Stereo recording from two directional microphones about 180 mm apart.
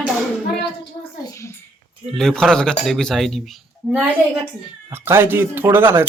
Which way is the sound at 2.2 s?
5° left (ahead or behind).